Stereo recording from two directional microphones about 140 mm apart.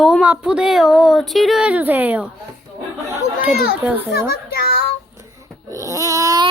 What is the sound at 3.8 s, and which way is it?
Speech, 10° right (ahead or behind).